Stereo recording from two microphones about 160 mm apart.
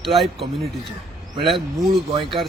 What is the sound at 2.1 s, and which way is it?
Speech, 30° right (ahead or behind).